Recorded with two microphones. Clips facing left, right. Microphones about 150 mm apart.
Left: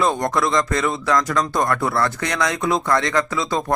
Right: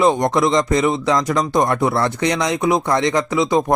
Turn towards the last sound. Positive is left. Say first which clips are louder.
# right 6 dB
turn(degrees=-20)  # may be behind; listen again after turning